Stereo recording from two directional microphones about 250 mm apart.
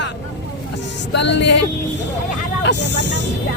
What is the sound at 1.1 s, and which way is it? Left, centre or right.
Speech, left.